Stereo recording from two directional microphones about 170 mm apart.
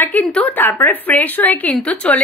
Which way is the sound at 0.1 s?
10° left (ahead or behind).